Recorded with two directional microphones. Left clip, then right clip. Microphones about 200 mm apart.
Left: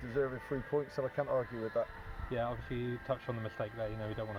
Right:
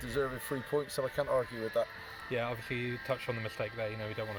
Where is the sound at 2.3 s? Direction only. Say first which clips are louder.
Right 2 dB; 45° right (ahead or behind).